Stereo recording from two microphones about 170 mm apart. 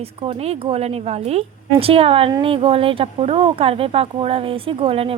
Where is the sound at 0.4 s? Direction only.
35° right (ahead or behind).